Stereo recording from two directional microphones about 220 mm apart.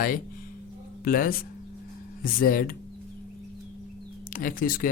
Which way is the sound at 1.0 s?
40° left (ahead or behind).